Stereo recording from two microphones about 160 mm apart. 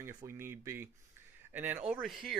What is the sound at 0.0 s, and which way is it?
Speech, 20° right (ahead or behind).